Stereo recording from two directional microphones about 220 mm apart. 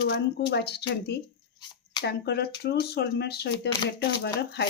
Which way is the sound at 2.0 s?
50° left (ahead or behind).